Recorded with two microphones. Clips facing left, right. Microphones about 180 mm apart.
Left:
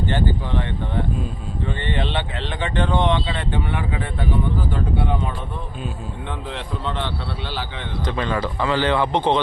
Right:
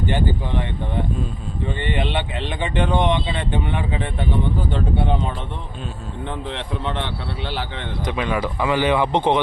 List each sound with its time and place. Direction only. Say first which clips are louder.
0.1 s speech: even; 15° right (ahead or behind)
1.6 s speech: right 1 dB; 15° right (ahead or behind)
8.0 s speech: right 1 dB; 10° right (ahead or behind)